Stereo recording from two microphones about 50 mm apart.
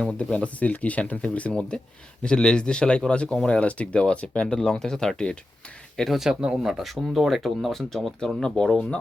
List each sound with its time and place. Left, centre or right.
0.2 s speech: left
6.1 s speech: centre